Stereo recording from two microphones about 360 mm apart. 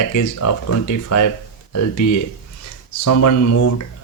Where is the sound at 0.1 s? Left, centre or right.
Left.